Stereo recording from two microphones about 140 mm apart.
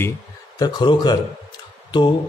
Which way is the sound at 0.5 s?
30° left (ahead or behind).